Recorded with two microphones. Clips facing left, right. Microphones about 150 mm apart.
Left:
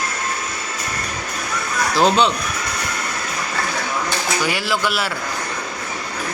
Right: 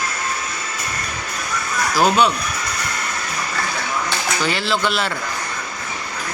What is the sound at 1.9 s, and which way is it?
Speech, 25° left (ahead or behind).